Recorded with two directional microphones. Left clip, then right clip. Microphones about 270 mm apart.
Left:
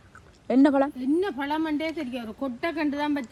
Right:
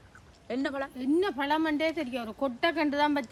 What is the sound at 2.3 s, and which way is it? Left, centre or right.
Speech, centre.